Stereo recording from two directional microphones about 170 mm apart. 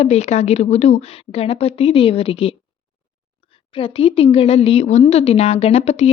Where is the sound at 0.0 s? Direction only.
40° left (ahead or behind).